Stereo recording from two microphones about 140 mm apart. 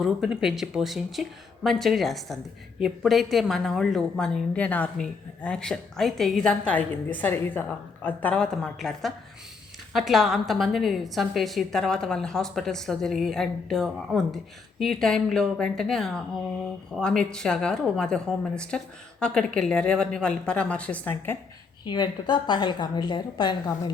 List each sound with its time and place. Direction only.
0.0 s a woman's voice: 5° right (ahead or behind); by 21.3 s 10° left (ahead or behind)
21.8 s a woman's voice: 30° left (ahead or behind)